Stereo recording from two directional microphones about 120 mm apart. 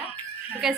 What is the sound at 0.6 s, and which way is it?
Speech, 5° right (ahead or behind).